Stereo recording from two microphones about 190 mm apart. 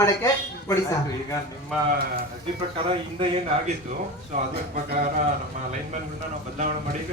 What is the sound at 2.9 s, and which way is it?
Speech, 30° right (ahead or behind).